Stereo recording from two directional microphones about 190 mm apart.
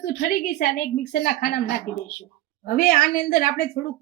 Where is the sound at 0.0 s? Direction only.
50° left (ahead or behind).